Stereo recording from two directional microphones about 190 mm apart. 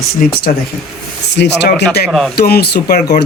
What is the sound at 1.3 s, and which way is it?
Speech, 65° left (ahead or behind).